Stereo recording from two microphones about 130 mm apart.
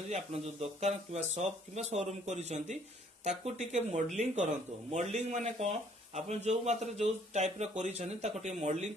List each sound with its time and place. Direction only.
0.1 s a man's voice: 55° right (ahead or behind)